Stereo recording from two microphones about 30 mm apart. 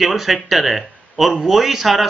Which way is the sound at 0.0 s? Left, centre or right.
Centre.